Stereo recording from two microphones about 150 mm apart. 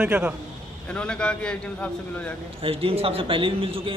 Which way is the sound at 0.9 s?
5° left (ahead or behind).